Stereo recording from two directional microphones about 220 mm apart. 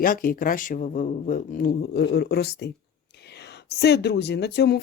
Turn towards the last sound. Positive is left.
turn(degrees=50)  # may be behind; listen again after turning